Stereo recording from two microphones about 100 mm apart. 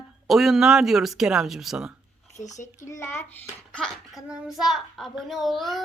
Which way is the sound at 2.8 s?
25° left (ahead or behind).